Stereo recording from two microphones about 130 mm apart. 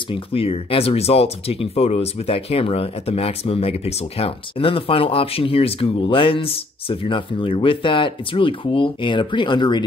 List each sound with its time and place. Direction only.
0.1 s speech: 45° left (ahead or behind)